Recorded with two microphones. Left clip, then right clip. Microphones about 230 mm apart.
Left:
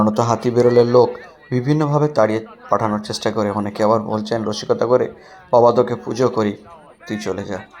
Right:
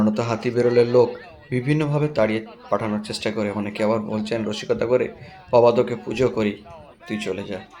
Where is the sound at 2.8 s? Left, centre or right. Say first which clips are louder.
Left 6 dB; centre.